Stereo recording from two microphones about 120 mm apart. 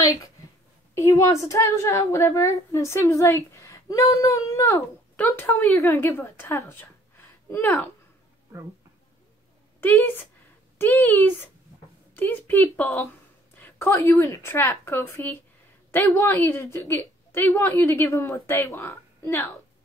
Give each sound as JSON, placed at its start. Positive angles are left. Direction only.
{"t": 0.0, "sound": "a woman's voice", "side_deg": 30}
{"t": 5.1, "sound": "a woman's voice", "side_deg": 15}
{"t": 9.8, "sound": "a woman's voice", "side_deg": 15}